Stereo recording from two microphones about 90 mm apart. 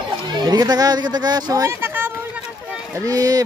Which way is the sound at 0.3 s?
45° right (ahead or behind).